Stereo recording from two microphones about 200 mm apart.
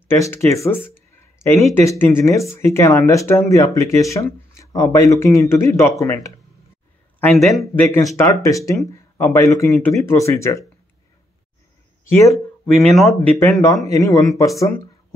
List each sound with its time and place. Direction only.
0.1 s speech: 15° left (ahead or behind)
7.2 s speech: centre (ahead or behind)
9.7 s speech: centre (ahead or behind)
9.9 s speech: 15° left (ahead or behind)
12.7 s speech: centre (ahead or behind)
13.4 s speech: 10° left (ahead or behind)